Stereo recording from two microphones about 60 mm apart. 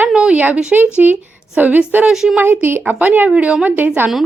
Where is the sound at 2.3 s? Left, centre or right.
Right.